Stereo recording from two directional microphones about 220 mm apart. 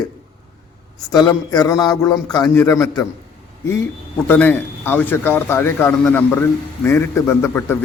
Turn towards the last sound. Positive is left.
turn(degrees=10)  # may be behind; listen again after turning